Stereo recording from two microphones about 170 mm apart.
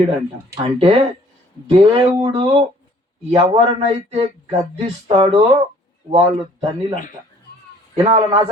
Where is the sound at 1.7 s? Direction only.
30° right (ahead or behind).